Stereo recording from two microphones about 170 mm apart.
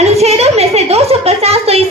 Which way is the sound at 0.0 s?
40° right (ahead or behind).